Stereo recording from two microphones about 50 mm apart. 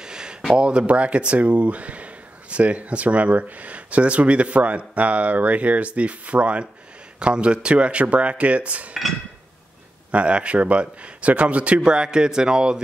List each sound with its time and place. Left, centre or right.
0.0 s a sound: centre
0.6 s speech: right
10.1 s speech: right